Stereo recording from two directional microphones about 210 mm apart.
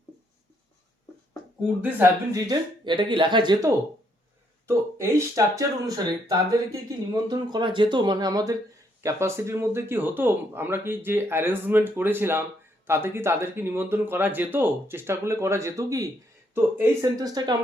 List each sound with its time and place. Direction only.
1.8 s speech: 15° right (ahead or behind)